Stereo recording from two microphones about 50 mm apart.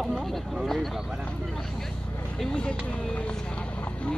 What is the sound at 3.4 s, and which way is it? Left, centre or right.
Vehicle, left.